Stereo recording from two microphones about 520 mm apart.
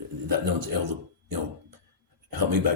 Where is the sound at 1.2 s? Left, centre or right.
Right.